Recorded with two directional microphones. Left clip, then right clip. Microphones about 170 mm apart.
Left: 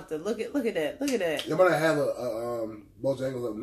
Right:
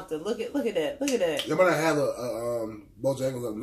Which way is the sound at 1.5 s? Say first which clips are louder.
Left 1 dB; 20° right (ahead or behind).